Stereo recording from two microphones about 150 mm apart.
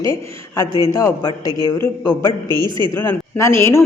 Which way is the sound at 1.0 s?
20° left (ahead or behind).